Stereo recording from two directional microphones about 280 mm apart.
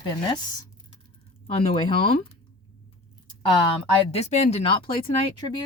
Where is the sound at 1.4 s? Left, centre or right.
Left.